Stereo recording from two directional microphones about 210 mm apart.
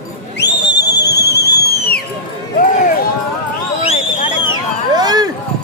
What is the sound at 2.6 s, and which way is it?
Run, 40° left (ahead or behind).